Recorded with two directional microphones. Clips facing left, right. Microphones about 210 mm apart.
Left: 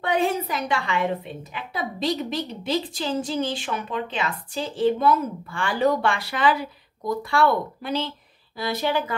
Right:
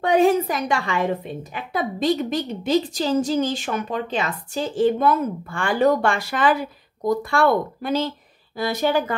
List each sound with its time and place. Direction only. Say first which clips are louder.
0.0 s a woman's voice: right 6 dB; 45° right (ahead or behind)